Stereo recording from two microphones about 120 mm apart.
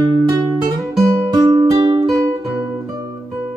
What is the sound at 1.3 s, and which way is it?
Music, 35° right (ahead or behind).